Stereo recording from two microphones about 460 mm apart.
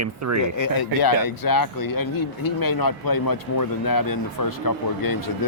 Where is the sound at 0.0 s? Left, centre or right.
Right.